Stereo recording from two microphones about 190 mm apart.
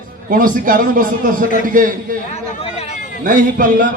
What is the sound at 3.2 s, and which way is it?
Speech, 45° right (ahead or behind).